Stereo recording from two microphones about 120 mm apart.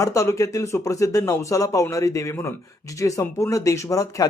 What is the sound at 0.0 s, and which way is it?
A man's voice, 25° left (ahead or behind).